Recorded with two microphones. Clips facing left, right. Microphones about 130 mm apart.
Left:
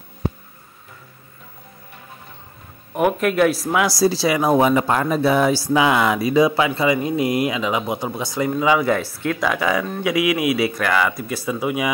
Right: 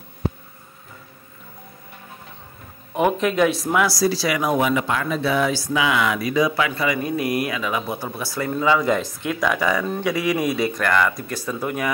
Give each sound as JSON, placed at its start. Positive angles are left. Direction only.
{"t": 2.9, "sound": "speech", "side_deg": 5}
{"t": 3.8, "sound": "speech", "side_deg": 25}
{"t": 8.8, "sound": "speech", "side_deg": -10}
{"t": 9.4, "sound": "speech", "side_deg": 5}